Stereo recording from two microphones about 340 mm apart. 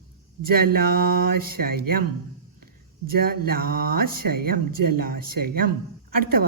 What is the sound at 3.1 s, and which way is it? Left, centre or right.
Speech, right.